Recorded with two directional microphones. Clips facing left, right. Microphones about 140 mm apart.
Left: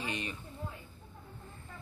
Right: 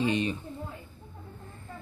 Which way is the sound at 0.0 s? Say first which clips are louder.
Right 11 dB; 25° right (ahead or behind).